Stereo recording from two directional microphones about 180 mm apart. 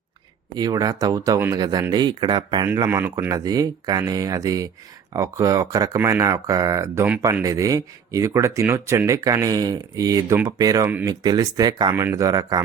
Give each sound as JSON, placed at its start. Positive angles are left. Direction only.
{"t": 0.5, "sound": "speech", "side_deg": -20}